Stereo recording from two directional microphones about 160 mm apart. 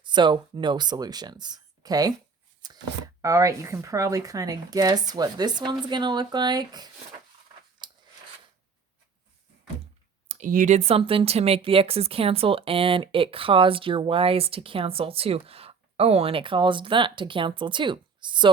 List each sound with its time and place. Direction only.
0.0 s speech: 30° right (ahead or behind)
7.8 s scissors: 25° right (ahead or behind)
10.2 s speech: 50° right (ahead or behind); by 18.5 s 30° right (ahead or behind)